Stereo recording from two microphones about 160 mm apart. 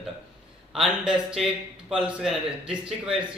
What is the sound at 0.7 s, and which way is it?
A man's voice, 5° right (ahead or behind).